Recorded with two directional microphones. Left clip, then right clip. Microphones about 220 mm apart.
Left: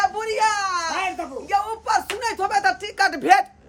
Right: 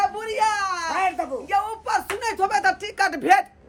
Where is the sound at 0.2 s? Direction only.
5° left (ahead or behind).